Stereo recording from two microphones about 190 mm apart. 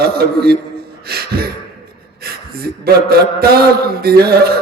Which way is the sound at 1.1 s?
55° right (ahead or behind).